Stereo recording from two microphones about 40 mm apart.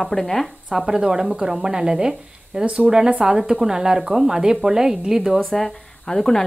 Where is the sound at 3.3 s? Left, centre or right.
Centre.